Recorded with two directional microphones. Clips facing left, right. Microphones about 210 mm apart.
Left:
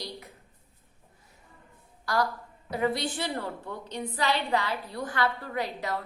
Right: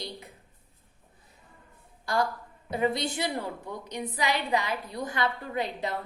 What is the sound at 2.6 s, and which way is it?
A woman's voice, 20° right (ahead or behind).